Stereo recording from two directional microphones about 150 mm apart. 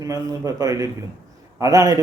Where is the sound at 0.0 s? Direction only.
25° right (ahead or behind).